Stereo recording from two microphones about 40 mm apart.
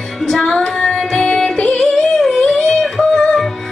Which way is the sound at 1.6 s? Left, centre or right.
Centre.